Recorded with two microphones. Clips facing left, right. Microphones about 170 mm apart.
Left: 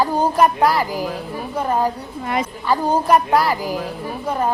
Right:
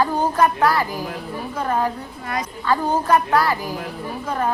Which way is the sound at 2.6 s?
10° left (ahead or behind).